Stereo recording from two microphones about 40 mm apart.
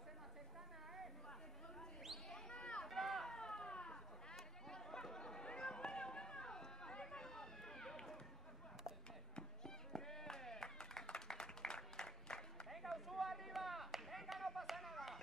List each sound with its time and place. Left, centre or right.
2.5 s a sound: left
2.9 s run: centre
3.3 s a sound: centre
7.2 s run: centre
9.3 s run: centre
12.6 s run: centre